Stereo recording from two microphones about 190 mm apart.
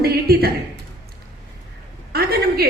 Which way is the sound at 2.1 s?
55° right (ahead or behind).